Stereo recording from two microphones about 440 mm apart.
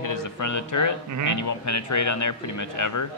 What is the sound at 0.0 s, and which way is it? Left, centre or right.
Speech, left.